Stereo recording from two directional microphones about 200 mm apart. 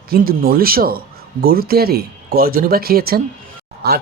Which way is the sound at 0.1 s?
50° right (ahead or behind).